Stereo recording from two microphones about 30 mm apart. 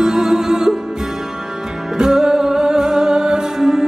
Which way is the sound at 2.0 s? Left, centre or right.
Right.